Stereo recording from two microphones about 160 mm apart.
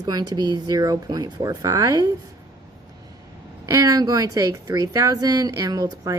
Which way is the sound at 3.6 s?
20° right (ahead or behind).